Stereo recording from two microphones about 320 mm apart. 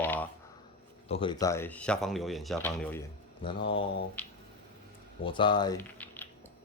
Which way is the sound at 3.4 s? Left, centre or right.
Centre.